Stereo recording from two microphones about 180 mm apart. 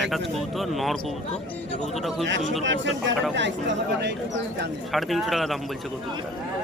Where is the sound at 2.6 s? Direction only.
90° right; by 4.7 s 75° right (ahead or behind).